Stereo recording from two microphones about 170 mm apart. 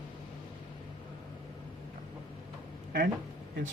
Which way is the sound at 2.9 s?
55° right (ahead or behind).